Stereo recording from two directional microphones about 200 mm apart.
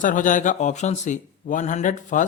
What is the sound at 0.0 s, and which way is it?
Speech, 40° left (ahead or behind).